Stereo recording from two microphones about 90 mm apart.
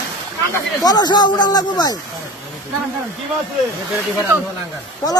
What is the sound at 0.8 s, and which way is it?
A man's voice, 50° left (ahead or behind).